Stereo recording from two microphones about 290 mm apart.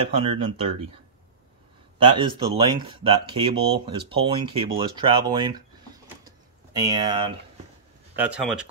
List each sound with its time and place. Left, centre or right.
0.1 s speech: centre
2.0 s speech: centre
6.2 s tick-tock: centre
8.2 s speech: centre